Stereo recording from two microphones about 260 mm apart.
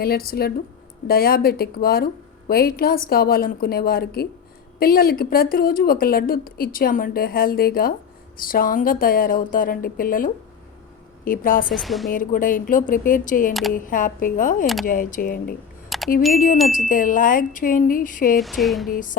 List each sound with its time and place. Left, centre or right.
0.0 s a woman's voice: left
11.7 s speech: centre
12.1 s a woman's voice: left
13.5 s speech: centre
13.7 s a woman's voice: left
15.9 s a sound: centre
16.3 s a woman's voice: left
18.3 s speech: centre
18.9 s a woman's voice: left